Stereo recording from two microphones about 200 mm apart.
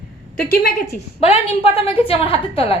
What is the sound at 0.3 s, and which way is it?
Speech, 50° left (ahead or behind).